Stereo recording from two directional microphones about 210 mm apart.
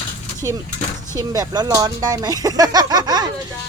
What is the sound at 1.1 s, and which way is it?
Speech, 15° right (ahead or behind).